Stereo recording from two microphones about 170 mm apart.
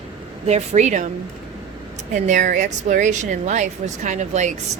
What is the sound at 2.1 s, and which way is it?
A woman's voice, 45° right (ahead or behind).